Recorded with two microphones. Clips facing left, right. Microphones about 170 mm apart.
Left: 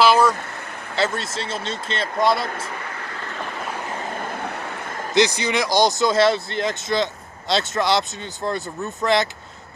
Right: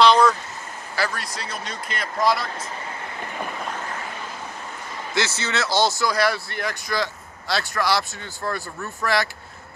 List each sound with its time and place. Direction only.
0.0 s vehicle: 10° left (ahead or behind)
0.9 s speech: 25° left (ahead or behind)
4.2 s vehicle: 60° left (ahead or behind)
5.1 s speech: 15° left (ahead or behind)